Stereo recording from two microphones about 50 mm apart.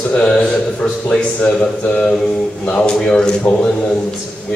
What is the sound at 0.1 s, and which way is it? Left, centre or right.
A man's voice, left.